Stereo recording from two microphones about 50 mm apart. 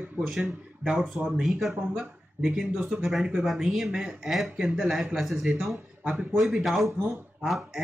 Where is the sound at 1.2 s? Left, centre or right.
Right.